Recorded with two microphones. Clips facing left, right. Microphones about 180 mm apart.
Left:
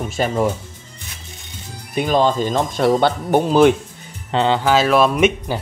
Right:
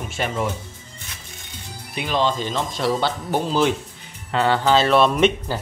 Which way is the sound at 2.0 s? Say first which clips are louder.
Left 6 dB; 45° left (ahead or behind).